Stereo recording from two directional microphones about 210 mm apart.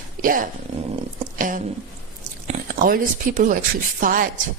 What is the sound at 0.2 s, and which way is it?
A woman's voice, 40° right (ahead or behind).